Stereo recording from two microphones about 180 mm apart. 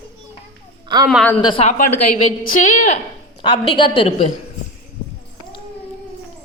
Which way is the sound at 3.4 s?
30° left (ahead or behind).